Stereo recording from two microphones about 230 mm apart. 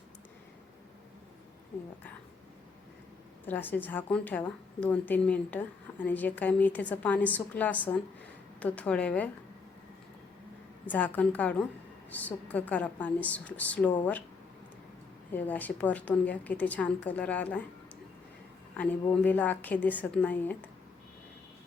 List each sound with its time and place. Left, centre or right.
3.4 s speech: centre
10.8 s speech: centre
15.3 s speech: centre
18.8 s speech: centre